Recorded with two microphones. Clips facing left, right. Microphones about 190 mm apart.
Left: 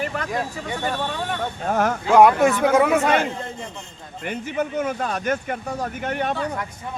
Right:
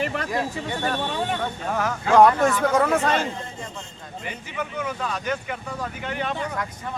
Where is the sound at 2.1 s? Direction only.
10° left (ahead or behind).